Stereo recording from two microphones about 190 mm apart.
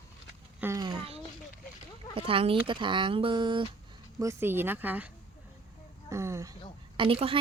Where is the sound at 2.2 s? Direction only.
30° right (ahead or behind).